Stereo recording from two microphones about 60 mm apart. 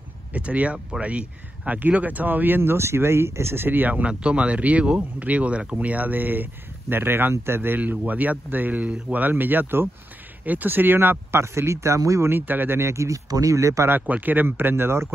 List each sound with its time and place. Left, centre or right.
0.3 s speech: right
3.9 s speech: centre; by 12.3 s right
12.3 s speech: right
13.8 s speech: right